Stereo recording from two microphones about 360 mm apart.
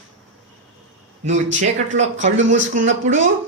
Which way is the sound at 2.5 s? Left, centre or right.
Centre.